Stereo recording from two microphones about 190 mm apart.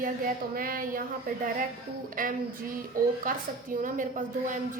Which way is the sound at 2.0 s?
45° right (ahead or behind).